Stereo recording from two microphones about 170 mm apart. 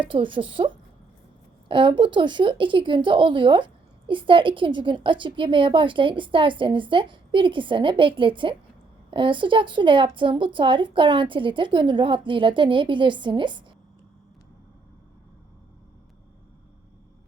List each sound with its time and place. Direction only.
0.0 s speech: 30° right (ahead or behind)